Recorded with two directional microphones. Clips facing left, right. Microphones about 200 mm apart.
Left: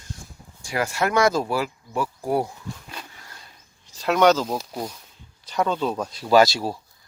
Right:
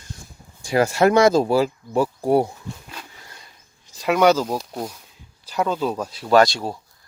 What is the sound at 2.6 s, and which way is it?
Bee, 10° left (ahead or behind).